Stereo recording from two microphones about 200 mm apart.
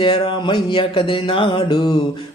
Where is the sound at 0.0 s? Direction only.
25° left (ahead or behind).